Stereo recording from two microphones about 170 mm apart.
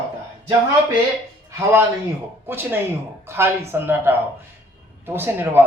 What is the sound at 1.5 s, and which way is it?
A man's voice, 15° right (ahead or behind).